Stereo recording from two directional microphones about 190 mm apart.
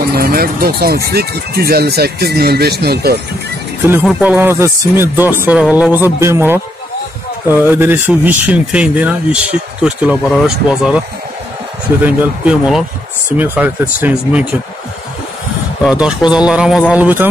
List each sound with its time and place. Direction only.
0.1 s speech: 50° right (ahead or behind)
4.2 s speech: 10° right (ahead or behind)
12.0 s speech: 10° right (ahead or behind)
15.8 s speech: 5° right (ahead or behind)